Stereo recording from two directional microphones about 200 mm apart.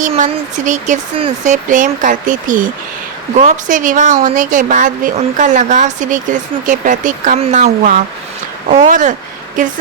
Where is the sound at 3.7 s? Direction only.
40° right (ahead or behind).